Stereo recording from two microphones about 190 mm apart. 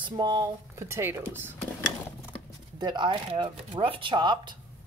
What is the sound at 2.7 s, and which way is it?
Speech, 25° right (ahead or behind).